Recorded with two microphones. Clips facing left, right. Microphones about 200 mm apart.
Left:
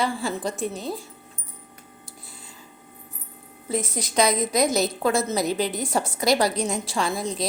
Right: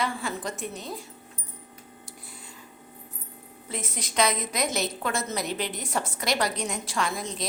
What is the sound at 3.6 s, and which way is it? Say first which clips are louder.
A woman's voice: left 8 dB; 35° left (ahead or behind).